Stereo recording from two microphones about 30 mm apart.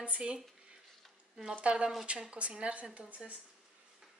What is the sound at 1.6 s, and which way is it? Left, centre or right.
Speech, right.